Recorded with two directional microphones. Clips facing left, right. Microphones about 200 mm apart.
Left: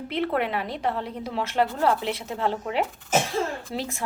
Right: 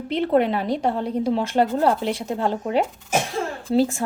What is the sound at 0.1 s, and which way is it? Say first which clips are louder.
Speech: right 7 dB; 30° right (ahead or behind).